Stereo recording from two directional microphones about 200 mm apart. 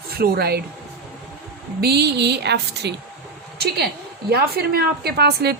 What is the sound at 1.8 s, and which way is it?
A woman's voice, 55° right (ahead or behind).